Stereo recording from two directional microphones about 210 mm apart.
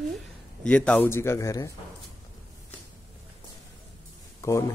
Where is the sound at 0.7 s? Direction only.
5° left (ahead or behind).